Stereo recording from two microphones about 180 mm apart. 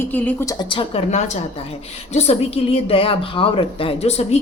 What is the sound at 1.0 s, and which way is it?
A woman's voice, 40° left (ahead or behind).